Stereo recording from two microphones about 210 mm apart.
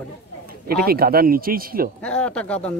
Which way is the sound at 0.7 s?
45° right (ahead or behind).